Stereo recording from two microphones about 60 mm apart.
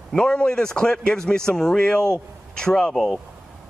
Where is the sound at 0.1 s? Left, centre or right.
Centre.